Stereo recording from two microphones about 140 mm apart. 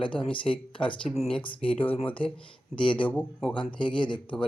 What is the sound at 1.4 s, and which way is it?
Speech, 40° left (ahead or behind).